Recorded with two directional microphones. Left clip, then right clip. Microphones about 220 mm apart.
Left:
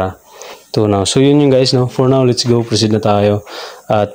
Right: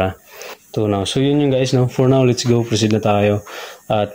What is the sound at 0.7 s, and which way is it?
Speech, 20° left (ahead or behind).